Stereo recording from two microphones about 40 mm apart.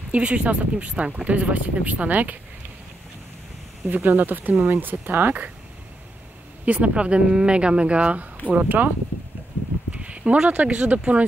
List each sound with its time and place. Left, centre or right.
0.1 s speech: right
3.9 s speech: right
6.6 s speech: right
8.5 s speech: right
9.8 s speech: right